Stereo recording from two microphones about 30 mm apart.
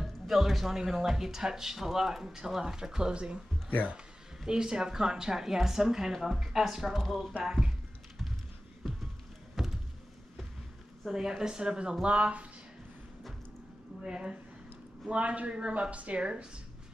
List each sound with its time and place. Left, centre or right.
0.0 s music: centre
0.9 s a woman's voice: centre; by 3.3 s right
4.5 s a woman's voice: right; by 7.3 s centre
9.6 s a sound: centre
11.1 s a woman's voice: right
12.0 s a man's voice: right
14.0 s a woman's voice: right
15.0 s a man's voice: right
15.7 s a man's voice: right
16.2 s speech: right